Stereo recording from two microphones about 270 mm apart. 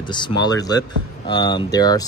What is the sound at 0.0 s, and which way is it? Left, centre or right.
Speech, centre.